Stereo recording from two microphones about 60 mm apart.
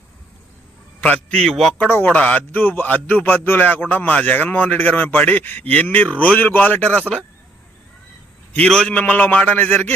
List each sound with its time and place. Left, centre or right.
1.0 s speech: left
1.4 s a man's voice: centre
1.8 s speech: left
2.0 s speech: left
8.5 s speech: centre